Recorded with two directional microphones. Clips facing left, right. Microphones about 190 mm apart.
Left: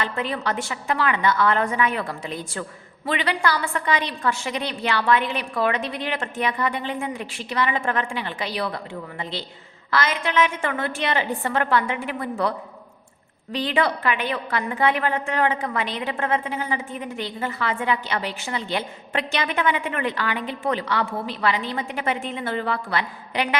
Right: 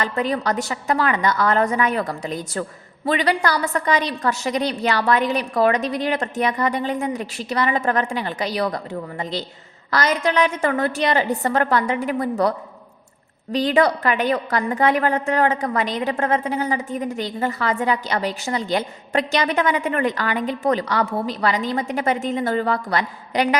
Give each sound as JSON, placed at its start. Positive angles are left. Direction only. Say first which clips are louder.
{"t": 0.0, "sound": "a woman's voice", "louder": "right 4 dB", "side_deg": -40}